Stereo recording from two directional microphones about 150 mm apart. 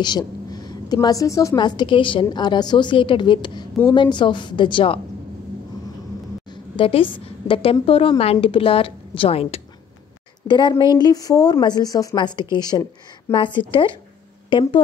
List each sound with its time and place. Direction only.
0.0 s a woman's voice: 30° left (ahead or behind)
6.5 s a woman's voice: 35° left (ahead or behind)